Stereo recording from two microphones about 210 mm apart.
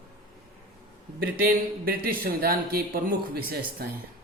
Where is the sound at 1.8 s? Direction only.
45° right (ahead or behind).